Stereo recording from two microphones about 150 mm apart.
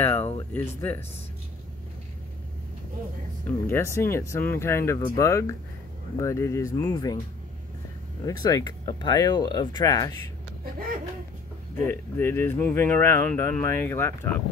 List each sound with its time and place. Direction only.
0.0 s speech: 15° left (ahead or behind)
3.4 s speech: 15° left (ahead or behind)
8.3 s speech: 25° left (ahead or behind)
10.6 s a sound: 75° right (ahead or behind)
11.9 s speech: 15° left (ahead or behind)